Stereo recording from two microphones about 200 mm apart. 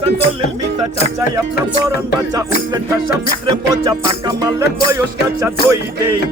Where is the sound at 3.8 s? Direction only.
20° right (ahead or behind).